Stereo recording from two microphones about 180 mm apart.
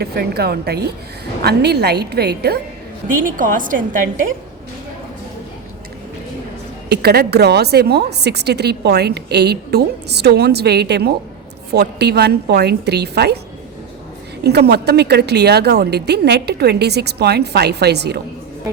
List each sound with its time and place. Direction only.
0.0 s a woman's voice: 65° right (ahead or behind)
3.2 s a woman's voice: 50° right (ahead or behind)
6.8 s a woman's voice: 65° right (ahead or behind)
14.4 s a woman's voice: 65° right (ahead or behind)